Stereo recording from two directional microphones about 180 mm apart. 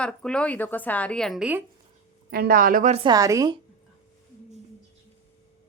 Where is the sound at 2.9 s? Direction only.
30° right (ahead or behind).